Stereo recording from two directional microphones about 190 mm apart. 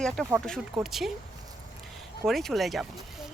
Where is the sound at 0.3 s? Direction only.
Centre (ahead or behind).